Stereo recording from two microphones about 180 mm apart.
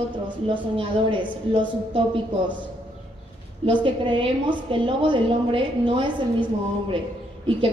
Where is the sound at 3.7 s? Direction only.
25° right (ahead or behind).